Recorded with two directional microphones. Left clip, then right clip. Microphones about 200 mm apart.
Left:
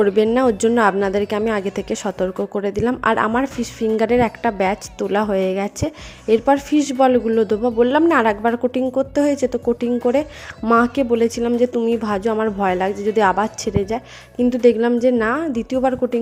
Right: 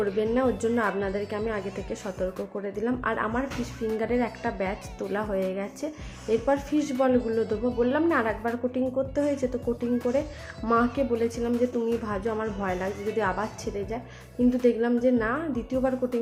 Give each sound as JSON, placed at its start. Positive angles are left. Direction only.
{"t": 0.0, "sound": "speech", "side_deg": 50}